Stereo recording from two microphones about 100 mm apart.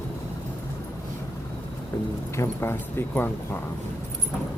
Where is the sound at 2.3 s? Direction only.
25° left (ahead or behind).